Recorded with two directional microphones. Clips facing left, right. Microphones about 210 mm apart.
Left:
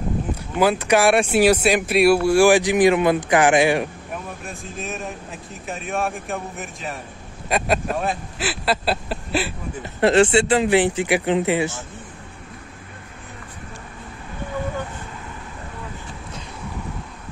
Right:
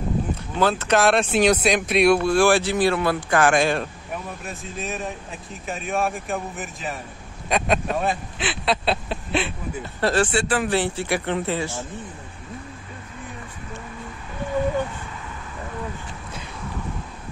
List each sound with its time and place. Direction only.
0.6 s speech: 10° left (ahead or behind)
4.1 s speech: centre (ahead or behind)
9.9 s speech: 25° left (ahead or behind)